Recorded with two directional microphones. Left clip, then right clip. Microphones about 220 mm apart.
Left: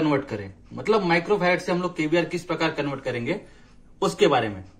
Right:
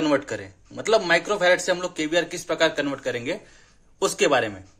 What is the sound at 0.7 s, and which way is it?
Speech, 45° right (ahead or behind).